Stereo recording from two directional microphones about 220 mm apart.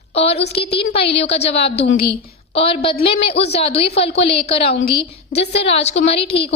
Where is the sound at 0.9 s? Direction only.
25° left (ahead or behind).